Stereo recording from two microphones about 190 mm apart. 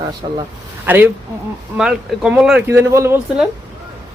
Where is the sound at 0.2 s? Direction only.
25° right (ahead or behind).